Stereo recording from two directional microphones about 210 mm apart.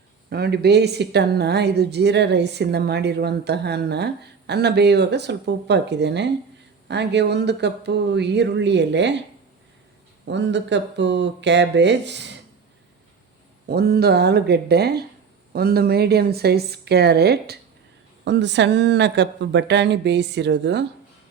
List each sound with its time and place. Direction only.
0.3 s a woman's voice: 50° right (ahead or behind)
10.2 s speech: 55° right (ahead or behind)
13.7 s a woman's voice: 50° right (ahead or behind)